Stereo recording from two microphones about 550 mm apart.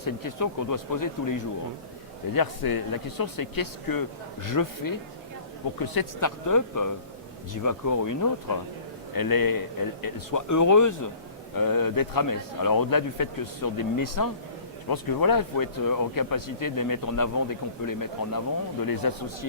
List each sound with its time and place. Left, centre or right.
0.0 s speech: left